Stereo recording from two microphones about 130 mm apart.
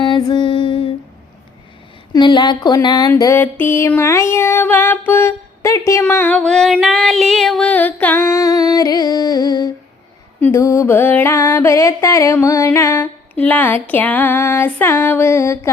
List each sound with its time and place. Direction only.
0.0 s music: 35° left (ahead or behind)
2.1 s speech: 35° left (ahead or behind)
3.2 s music: 25° left (ahead or behind)
3.4 s a sound: 15° left (ahead or behind)
8.7 s music: 30° left (ahead or behind)